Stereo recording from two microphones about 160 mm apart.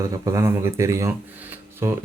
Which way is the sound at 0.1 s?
20° right (ahead or behind).